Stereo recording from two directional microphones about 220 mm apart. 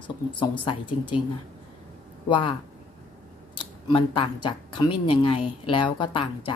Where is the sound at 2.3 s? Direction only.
20° left (ahead or behind).